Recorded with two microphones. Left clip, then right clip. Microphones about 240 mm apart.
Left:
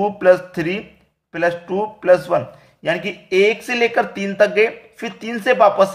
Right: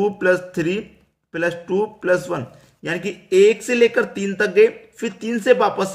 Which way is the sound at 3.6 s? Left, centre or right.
Centre.